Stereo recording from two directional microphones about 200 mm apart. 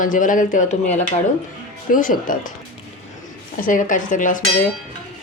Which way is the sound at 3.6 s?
40° left (ahead or behind).